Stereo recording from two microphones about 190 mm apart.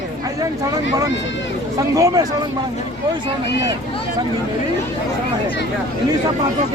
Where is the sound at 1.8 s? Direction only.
20° right (ahead or behind).